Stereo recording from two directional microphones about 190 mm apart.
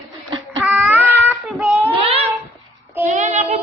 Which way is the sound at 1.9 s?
30° right (ahead or behind).